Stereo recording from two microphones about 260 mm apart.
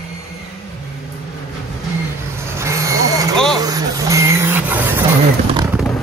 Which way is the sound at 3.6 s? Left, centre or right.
Centre.